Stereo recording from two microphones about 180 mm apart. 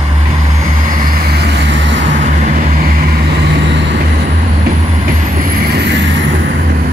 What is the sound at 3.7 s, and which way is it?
Vehicle, 75° right (ahead or behind).